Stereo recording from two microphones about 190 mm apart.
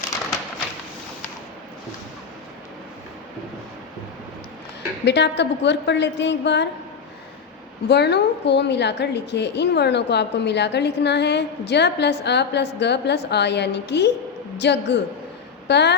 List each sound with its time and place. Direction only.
5.0 s a woman's voice: 65° left (ahead or behind)
7.9 s a woman's voice: 60° left (ahead or behind)